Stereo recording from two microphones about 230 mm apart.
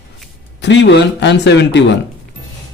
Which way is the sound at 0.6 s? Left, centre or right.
Left.